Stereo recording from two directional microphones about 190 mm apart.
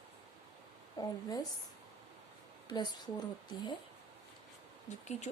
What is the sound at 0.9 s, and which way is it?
Speech, 20° left (ahead or behind).